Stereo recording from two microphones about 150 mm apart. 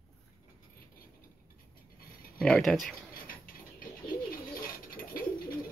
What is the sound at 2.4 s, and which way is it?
Speech, 5° left (ahead or behind).